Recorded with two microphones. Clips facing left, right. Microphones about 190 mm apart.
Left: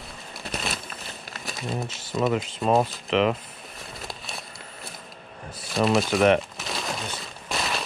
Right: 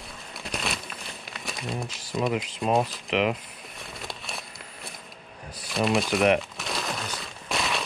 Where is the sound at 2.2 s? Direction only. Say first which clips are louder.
Left 2 dB; centre (ahead or behind).